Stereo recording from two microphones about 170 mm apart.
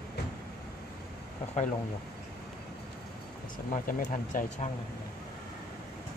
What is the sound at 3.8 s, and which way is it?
Speech, 50° left (ahead or behind).